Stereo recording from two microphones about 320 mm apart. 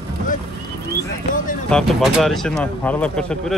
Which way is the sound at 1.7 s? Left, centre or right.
Centre.